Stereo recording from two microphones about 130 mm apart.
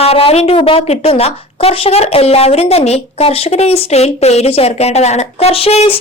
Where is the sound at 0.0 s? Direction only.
50° left (ahead or behind).